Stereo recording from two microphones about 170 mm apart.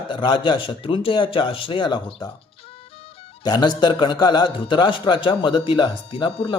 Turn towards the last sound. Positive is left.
turn(degrees=30)  # may be behind; listen again after turning